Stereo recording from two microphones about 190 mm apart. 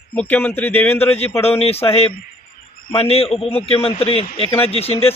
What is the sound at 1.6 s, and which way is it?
A man's voice, 30° left (ahead or behind).